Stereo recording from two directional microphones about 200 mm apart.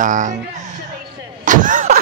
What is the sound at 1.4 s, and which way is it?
Vehicle, 40° right (ahead or behind).